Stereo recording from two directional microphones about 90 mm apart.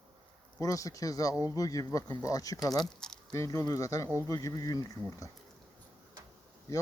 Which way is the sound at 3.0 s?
5° left (ahead or behind).